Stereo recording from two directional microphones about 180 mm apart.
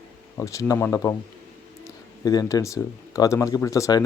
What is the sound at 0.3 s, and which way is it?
Speech, 15° left (ahead or behind).